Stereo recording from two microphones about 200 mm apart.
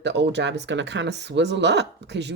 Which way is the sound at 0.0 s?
60° right (ahead or behind).